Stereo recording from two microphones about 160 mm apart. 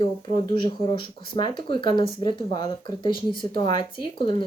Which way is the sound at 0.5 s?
30° left (ahead or behind).